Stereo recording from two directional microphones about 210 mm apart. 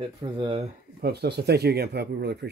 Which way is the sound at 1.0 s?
50° right (ahead or behind).